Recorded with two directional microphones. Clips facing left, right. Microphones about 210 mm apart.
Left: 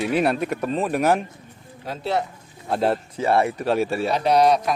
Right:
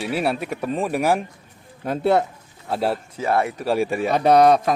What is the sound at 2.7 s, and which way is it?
Speech, 5° right (ahead or behind).